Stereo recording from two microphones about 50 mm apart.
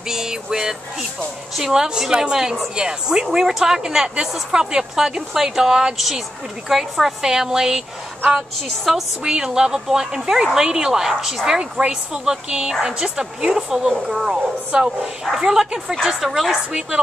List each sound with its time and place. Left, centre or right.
0.1 s music: centre
1.5 s a woman's voice: centre